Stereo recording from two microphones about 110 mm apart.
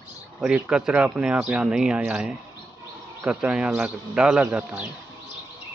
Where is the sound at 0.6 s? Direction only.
10° right (ahead or behind).